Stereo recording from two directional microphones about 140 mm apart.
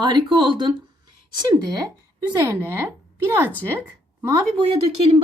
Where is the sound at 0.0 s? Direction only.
30° right (ahead or behind).